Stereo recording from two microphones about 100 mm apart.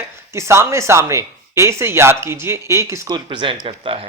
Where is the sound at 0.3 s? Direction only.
25° right (ahead or behind).